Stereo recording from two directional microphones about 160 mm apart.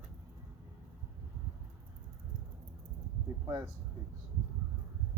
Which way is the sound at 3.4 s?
20° right (ahead or behind).